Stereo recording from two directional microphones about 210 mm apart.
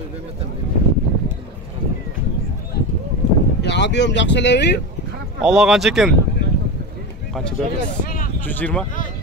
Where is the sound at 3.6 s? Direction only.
55° left (ahead or behind).